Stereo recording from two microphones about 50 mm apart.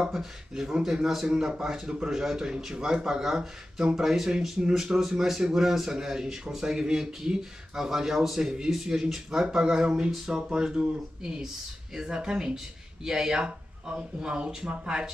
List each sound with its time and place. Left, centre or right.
0.0 s speech: centre